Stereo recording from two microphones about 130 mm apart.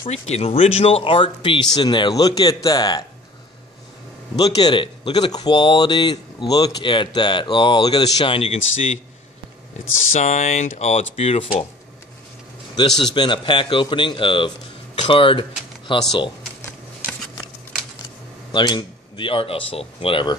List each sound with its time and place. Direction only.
0.1 s speech: 50° left (ahead or behind); by 3.1 s 30° left (ahead or behind)
4.4 s speech: 35° left (ahead or behind)
8.4 s speech: 50° left (ahead or behind)
10.1 s speech: 65° left (ahead or behind); by 11.5 s 50° left (ahead or behind)
13.1 s speech: 35° left (ahead or behind)
18.5 s speech: 35° left (ahead or behind)